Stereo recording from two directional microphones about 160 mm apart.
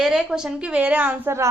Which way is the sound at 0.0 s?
5° right (ahead or behind).